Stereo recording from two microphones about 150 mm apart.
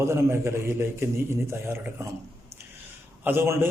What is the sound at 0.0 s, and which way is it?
A man's voice, 20° right (ahead or behind).